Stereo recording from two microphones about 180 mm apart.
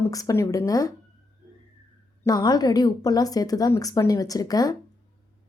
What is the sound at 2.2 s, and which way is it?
Speech, 20° left (ahead or behind).